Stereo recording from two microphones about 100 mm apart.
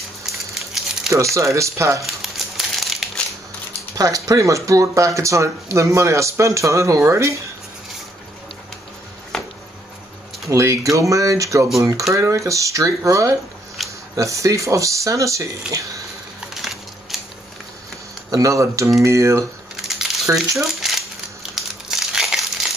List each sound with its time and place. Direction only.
0.6 s rattle: centre (ahead or behind)
1.1 s speech: 30° right (ahead or behind)
2.0 s crumpling: centre (ahead or behind)
3.9 s speech: 35° right (ahead or behind)
9.3 s a sound: 5° left (ahead or behind)
10.5 s speech: 35° right (ahead or behind)
13.8 s a sound: centre (ahead or behind)
14.1 s speech: 35° right (ahead or behind)
15.7 s speech: 5° right (ahead or behind)
16.3 s a sound: 5° right (ahead or behind)
18.3 s speech: 35° right (ahead or behind)
20.3 s crumpling: centre (ahead or behind)